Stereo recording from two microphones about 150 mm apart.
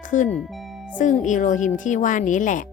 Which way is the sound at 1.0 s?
55° left (ahead or behind).